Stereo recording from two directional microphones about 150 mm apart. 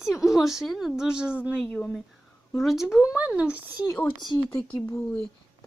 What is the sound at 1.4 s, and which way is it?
Speech, 5° left (ahead or behind).